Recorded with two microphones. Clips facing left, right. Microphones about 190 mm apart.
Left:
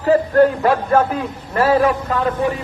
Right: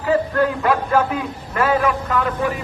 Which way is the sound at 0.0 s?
35° left (ahead or behind).